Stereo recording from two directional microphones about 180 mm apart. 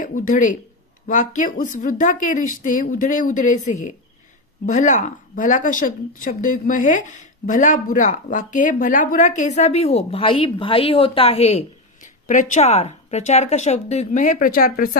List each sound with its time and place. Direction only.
0.0 s a woman's voice: 50° left (ahead or behind)